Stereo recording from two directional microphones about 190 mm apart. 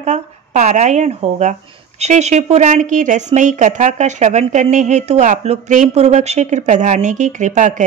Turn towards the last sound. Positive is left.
turn(degrees=-40)  # may be behind; listen again after turning